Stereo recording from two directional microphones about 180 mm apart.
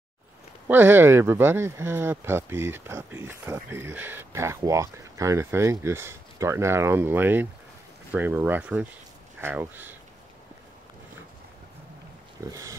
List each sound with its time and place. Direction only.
0.7 s speech: 10° right (ahead or behind)
12.4 s speech: 20° right (ahead or behind)